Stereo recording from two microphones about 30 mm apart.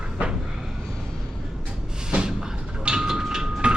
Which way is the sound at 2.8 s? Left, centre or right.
Right.